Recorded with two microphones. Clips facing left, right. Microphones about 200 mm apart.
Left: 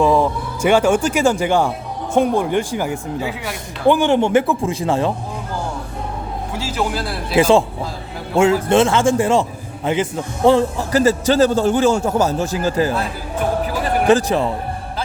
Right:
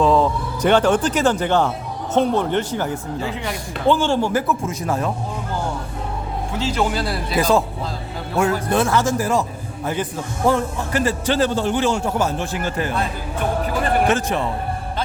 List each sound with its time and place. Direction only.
0.0 s speech: 10° left (ahead or behind); by 5.1 s 30° left (ahead or behind)
6.6 s speech: 5° left (ahead or behind)
7.3 s a man's voice: 25° left (ahead or behind)
14.1 s a man's voice: 35° left (ahead or behind)